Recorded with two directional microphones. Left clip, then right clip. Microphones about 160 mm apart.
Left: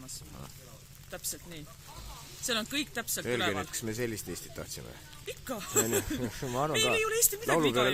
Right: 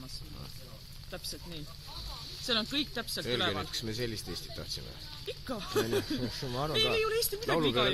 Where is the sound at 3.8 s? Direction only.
40° left (ahead or behind).